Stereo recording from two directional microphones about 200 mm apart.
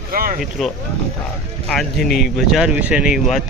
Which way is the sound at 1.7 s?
Centre (ahead or behind).